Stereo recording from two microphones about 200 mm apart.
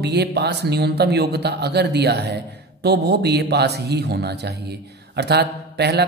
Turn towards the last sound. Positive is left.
turn(degrees=-55)  # may be behind; listen again after turning